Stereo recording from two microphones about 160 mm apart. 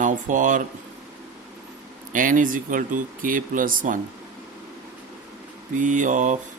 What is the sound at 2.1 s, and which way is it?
Speech, 55° right (ahead or behind).